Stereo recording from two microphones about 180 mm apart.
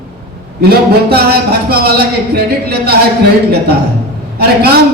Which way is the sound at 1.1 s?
60° right (ahead or behind).